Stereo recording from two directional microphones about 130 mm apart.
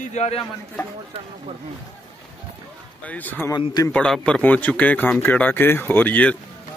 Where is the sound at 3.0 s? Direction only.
10° left (ahead or behind).